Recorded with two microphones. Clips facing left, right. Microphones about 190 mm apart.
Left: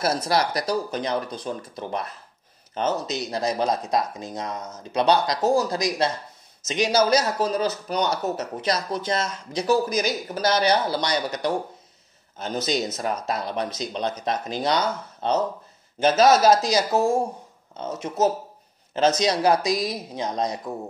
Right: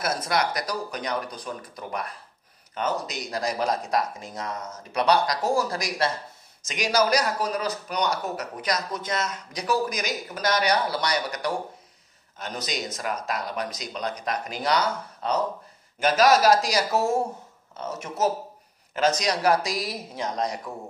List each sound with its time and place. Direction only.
0.0 s speech: 30° left (ahead or behind)